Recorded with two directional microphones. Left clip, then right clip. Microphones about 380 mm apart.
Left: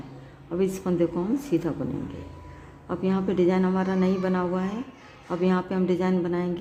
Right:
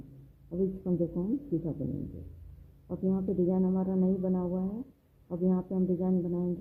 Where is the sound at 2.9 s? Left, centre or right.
Left.